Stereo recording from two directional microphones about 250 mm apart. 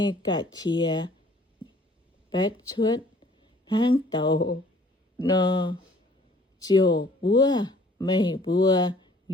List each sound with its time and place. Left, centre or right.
0.0 s speech: centre
2.6 s speech: centre